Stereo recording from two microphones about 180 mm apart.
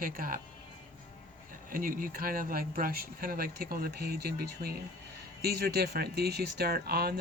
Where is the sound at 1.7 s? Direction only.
50° right (ahead or behind).